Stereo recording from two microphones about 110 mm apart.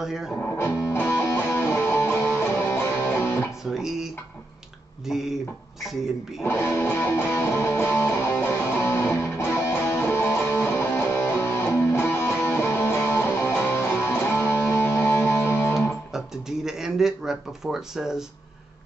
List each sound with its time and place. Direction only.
0.0 s speech: 5° right (ahead or behind)
0.6 s music: 25° left (ahead or behind)
3.6 s speech: 5° right (ahead or behind)
6.4 s music: 20° left (ahead or behind)
16.1 s speech: 5° right (ahead or behind)